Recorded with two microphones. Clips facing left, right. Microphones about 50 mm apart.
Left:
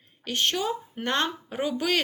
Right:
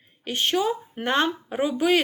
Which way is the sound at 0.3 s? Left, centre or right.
Centre.